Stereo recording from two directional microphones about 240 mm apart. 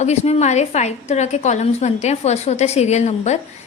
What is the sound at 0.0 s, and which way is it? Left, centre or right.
A woman's voice, left.